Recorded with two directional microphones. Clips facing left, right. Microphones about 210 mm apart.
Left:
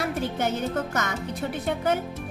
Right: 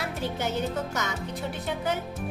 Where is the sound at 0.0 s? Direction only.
50° left (ahead or behind).